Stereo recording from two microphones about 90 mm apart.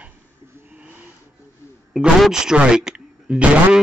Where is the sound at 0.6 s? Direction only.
15° right (ahead or behind).